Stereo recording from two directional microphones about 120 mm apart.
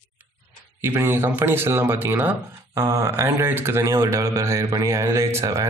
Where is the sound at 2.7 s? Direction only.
25° right (ahead or behind).